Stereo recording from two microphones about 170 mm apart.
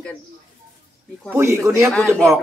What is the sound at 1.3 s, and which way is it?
Speech, 15° right (ahead or behind).